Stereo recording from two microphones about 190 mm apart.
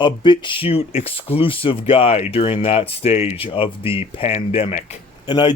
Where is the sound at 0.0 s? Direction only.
25° left (ahead or behind).